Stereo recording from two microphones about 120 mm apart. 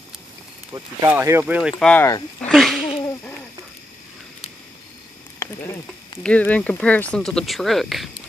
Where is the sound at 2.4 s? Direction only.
5° left (ahead or behind).